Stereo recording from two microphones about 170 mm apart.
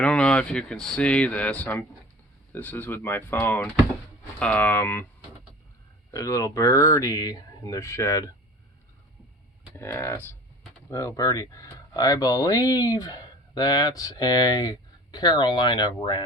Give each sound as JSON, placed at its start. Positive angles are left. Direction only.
{"t": 0.0, "sound": "speech", "side_deg": 5}
{"t": 6.1, "sound": "speech", "side_deg": 20}
{"t": 9.7, "sound": "speech", "side_deg": 15}